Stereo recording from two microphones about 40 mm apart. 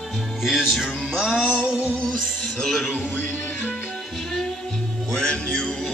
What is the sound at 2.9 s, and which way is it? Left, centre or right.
Music, left.